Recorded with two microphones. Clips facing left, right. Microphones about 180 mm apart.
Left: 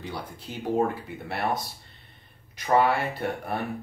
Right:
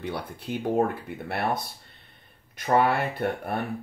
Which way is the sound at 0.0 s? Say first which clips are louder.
Right 3 dB; 60° right (ahead or behind).